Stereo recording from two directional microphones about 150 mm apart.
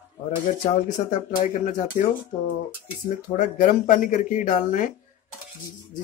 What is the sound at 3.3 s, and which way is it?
Speech, 60° left (ahead or behind).